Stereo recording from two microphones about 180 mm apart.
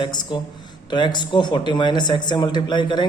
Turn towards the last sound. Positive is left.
turn(degrees=25)  # may be behind; listen again after turning